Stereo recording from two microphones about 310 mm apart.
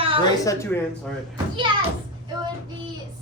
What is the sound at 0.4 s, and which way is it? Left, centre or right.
Speech, centre.